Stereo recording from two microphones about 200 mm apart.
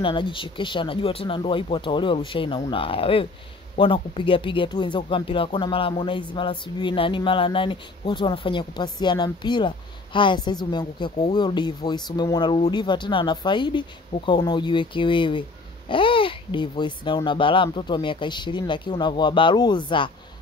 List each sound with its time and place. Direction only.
0.0 s speech: 25° left (ahead or behind)